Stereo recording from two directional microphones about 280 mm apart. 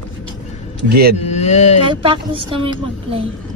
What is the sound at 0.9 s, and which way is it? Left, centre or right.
Speech, right.